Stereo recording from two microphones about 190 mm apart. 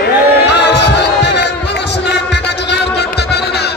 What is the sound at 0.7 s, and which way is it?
Music, 60° left (ahead or behind).